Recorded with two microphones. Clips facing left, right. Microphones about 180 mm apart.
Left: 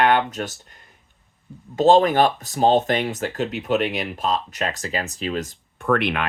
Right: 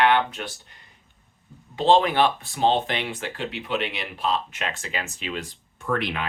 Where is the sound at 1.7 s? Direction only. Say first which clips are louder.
Left 4 dB; 45° left (ahead or behind).